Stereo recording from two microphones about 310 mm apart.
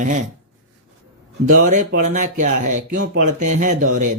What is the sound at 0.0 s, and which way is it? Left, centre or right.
Speech, right.